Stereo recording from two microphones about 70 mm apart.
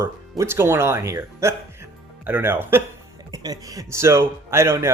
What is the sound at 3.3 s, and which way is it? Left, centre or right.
A man's voice, right.